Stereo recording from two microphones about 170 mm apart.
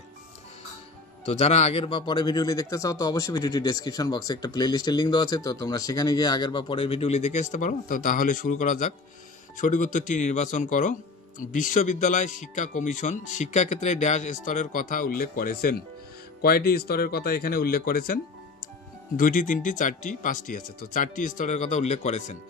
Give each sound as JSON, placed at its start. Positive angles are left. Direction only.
{"t": 1.2, "sound": "a man's voice", "side_deg": 40}